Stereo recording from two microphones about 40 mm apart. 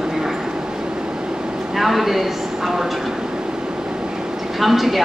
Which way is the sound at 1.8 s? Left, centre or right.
Centre.